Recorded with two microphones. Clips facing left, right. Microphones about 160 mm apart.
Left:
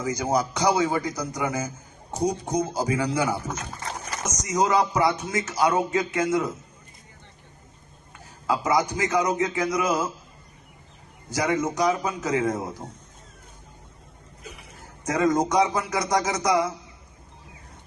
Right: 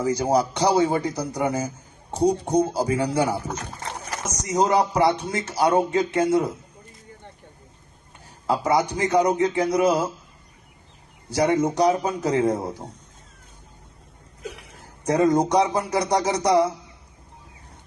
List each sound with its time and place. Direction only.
0.0 s speech: 30° right (ahead or behind)
8.4 s speech: 30° right (ahead or behind)
11.3 s speech: 30° right (ahead or behind)
14.5 s a sound: 65° right (ahead or behind)
15.0 s speech: 30° right (ahead or behind)